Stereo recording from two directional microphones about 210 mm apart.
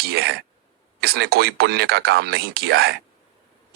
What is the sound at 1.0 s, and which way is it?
Speech, 50° right (ahead or behind).